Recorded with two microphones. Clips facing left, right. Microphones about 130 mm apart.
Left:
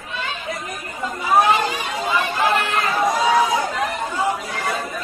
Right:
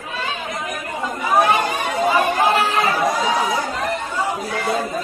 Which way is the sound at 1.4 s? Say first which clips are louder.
Right 1 dB; 50° right (ahead or behind).